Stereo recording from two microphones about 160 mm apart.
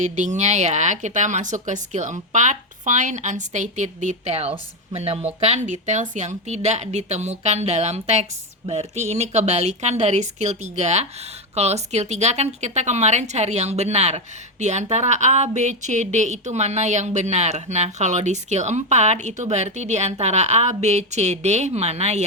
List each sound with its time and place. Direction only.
0.0 s a woman's voice: 50° right (ahead or behind)